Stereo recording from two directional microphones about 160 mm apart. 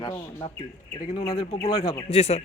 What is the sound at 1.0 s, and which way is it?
A man's voice, 30° left (ahead or behind).